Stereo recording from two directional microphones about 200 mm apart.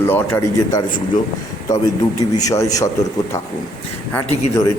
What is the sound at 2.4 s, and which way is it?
Speech, 15° left (ahead or behind).